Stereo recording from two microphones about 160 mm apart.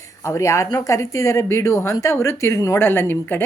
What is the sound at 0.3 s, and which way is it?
A woman's voice, 20° left (ahead or behind).